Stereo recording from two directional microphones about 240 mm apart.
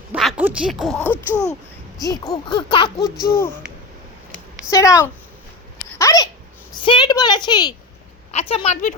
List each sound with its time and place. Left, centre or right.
0.1 s speech: centre
4.7 s speech: centre
6.0 s a sound: centre
6.8 s a woman's voice: centre